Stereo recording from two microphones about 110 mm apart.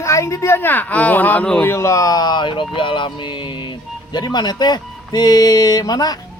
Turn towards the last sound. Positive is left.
turn(degrees=35)  # may be behind; listen again after turning